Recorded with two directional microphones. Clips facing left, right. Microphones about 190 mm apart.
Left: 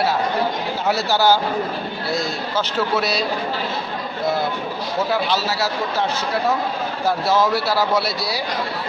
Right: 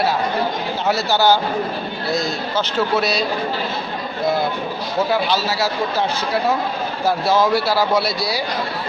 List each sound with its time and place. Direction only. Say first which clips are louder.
0.9 s a man's voice: right 1 dB; 10° left (ahead or behind)
5.1 s speech: right 2 dB; centre (ahead or behind)